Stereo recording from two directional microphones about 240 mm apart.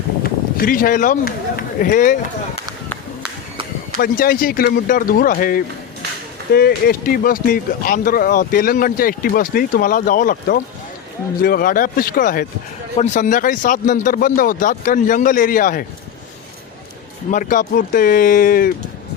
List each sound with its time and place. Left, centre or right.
0.2 s speech: left
4.0 s speech: left
17.3 s speech: left